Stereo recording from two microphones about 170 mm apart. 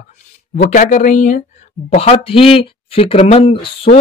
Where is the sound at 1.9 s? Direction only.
35° left (ahead or behind).